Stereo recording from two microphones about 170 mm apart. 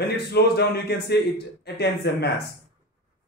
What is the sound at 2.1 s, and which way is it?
Speech, 65° left (ahead or behind).